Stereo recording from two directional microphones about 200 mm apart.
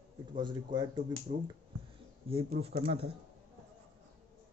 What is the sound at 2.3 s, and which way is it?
Speech, 30° right (ahead or behind).